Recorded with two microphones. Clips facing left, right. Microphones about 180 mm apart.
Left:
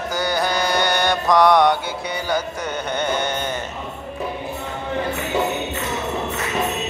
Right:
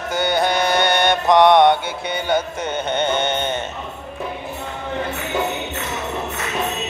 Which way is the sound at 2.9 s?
25° right (ahead or behind).